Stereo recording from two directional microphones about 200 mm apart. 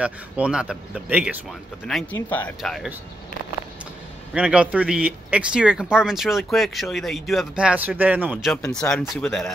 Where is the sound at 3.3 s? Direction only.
40° left (ahead or behind).